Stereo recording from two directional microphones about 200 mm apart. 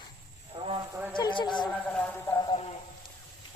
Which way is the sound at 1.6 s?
5° left (ahead or behind).